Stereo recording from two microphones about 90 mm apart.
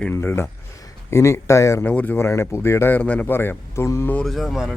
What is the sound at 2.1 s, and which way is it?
Speech, 30° left (ahead or behind).